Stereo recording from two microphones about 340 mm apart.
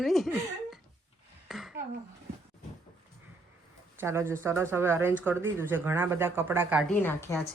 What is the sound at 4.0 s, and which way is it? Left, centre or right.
Speech, centre.